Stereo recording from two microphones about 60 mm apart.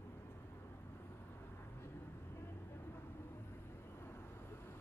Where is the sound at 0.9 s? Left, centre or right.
Left.